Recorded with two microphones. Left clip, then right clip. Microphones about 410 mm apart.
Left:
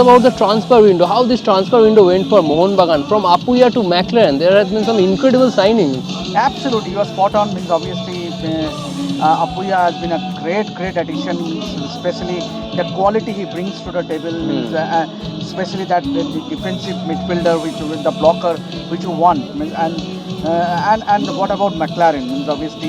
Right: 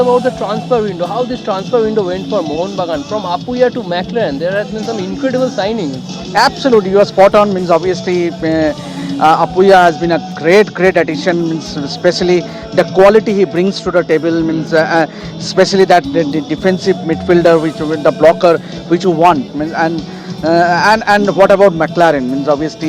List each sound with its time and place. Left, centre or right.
0.0 s speech: left
6.3 s speech: right